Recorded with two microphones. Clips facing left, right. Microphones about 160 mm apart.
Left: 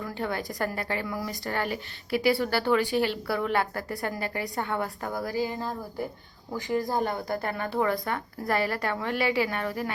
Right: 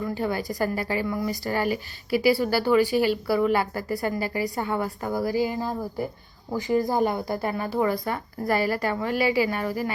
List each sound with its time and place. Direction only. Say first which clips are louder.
0.1 s a woman's voice: right 4 dB; 5° right (ahead or behind)
5.3 s speech: right 3 dB; 20° right (ahead or behind)
6.9 s a woman's voice: right 4 dB; 10° right (ahead or behind)